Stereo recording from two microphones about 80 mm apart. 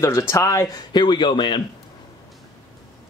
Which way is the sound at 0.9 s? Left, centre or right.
Left.